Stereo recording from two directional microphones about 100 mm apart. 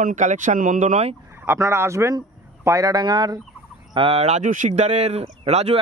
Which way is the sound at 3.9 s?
70° right (ahead or behind).